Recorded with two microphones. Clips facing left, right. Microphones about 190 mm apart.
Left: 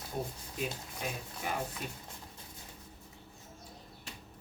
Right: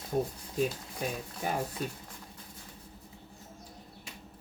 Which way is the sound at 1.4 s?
40° right (ahead or behind).